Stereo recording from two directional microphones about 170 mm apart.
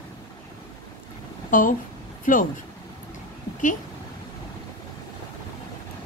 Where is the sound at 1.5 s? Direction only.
50° left (ahead or behind).